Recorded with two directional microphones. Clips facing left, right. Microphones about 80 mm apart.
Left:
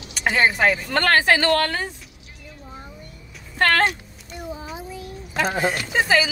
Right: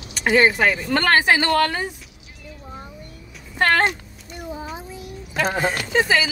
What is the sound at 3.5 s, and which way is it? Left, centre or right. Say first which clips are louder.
Speech: right 1 dB; centre.